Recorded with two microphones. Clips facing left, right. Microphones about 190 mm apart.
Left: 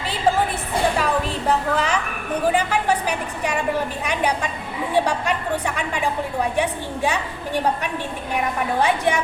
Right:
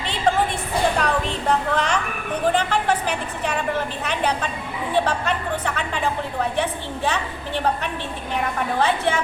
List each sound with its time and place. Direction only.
0.9 s a sound: 5° left (ahead or behind)
2.4 s a woman's voice: 10° left (ahead or behind)
8.8 s a woman's voice: 15° left (ahead or behind)